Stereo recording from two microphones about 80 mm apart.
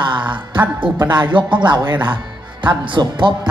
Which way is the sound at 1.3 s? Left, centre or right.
Right.